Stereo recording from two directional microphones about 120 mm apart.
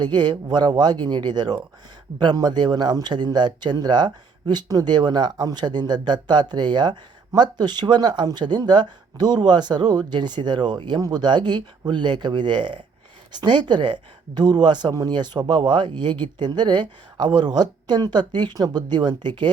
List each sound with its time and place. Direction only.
0.0 s speech: 40° right (ahead or behind)